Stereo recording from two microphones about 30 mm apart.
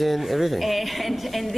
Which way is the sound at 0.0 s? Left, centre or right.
Centre.